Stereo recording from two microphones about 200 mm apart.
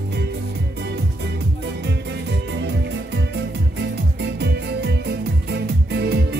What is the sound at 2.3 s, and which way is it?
Music, 60° right (ahead or behind).